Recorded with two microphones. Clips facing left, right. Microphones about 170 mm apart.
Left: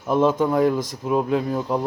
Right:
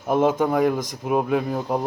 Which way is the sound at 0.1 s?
50° right (ahead or behind).